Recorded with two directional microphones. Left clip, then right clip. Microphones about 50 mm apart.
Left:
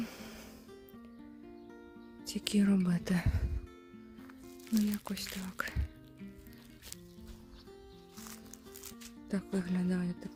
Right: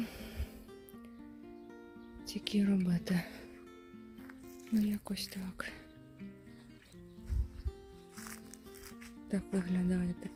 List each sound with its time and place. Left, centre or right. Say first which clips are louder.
0.0 s music: even; centre
2.2 s speech: left 2 dB; left
2.8 s speech: left 2 dB; left
4.9 s speech: left 1 dB; centre
9.3 s speech: even; centre